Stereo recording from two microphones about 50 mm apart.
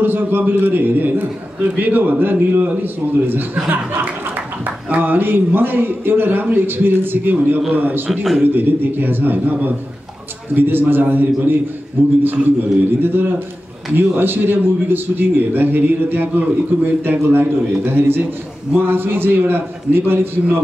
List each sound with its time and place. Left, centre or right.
0.0 s a man's voice: right
4.9 s a man's voice: right
8.1 s a man's voice: centre
8.5 s a man's voice: right